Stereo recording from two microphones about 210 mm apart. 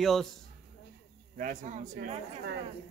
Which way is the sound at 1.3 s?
35° right (ahead or behind).